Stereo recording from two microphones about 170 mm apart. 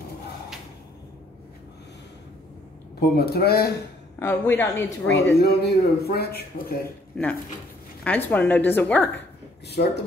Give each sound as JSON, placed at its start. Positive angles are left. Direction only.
{"t": 3.0, "sound": "a man's voice", "side_deg": 65}
{"t": 4.2, "sound": "speech", "side_deg": 15}
{"t": 5.0, "sound": "a man's voice", "side_deg": 75}
{"t": 7.2, "sound": "speech", "side_deg": 5}
{"t": 9.8, "sound": "speech", "side_deg": 60}